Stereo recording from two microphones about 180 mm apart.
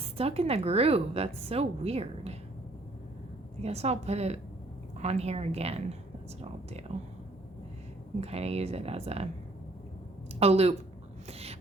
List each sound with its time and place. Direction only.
0.0 s a woman's voice: 35° right (ahead or behind)
3.6 s a woman's voice: 35° right (ahead or behind)
8.2 s a woman's voice: 35° right (ahead or behind)
10.4 s a woman's voice: 35° right (ahead or behind)
11.3 s a sound: 35° right (ahead or behind)